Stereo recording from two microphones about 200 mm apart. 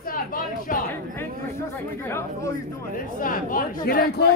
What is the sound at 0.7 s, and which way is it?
Speech, 45° left (ahead or behind).